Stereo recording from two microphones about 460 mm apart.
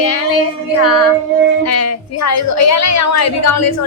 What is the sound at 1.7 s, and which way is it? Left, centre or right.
A woman's voice, left.